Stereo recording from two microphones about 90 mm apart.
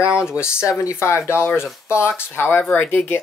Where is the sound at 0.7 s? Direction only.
30° left (ahead or behind).